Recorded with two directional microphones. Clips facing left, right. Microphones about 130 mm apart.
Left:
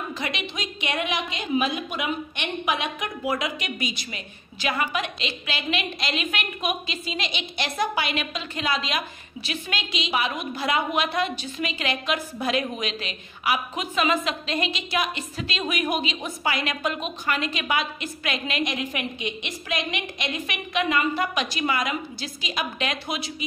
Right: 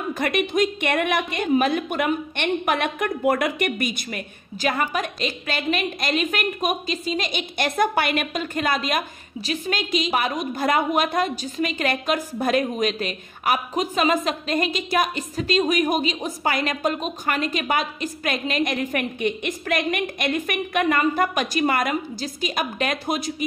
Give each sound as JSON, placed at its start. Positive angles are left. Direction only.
{"t": 0.1, "sound": "a woman's voice", "side_deg": -50}